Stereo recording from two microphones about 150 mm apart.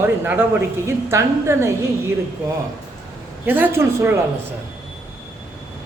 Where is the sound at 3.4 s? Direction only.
15° right (ahead or behind).